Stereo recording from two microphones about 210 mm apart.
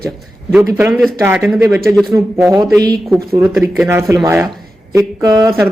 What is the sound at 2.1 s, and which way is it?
Speech, 15° right (ahead or behind).